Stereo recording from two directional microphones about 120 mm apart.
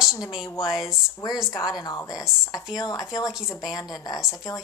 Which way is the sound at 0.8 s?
30° left (ahead or behind).